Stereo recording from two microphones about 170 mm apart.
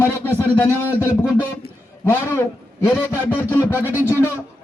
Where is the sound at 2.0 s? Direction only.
15° left (ahead or behind).